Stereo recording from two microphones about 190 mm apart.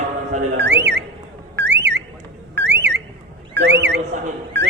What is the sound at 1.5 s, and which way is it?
Car alarm, 65° right (ahead or behind).